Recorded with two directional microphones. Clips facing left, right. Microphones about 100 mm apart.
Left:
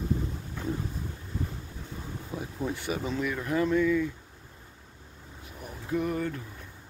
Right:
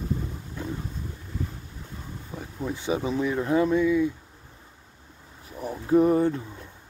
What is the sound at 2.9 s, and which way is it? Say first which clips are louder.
Speech: right 8 dB; 20° right (ahead or behind).